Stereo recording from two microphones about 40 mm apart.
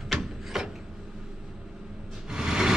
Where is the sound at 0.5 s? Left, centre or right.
Centre.